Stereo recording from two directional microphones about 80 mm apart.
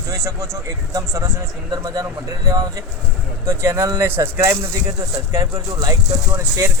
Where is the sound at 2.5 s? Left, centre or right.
Right.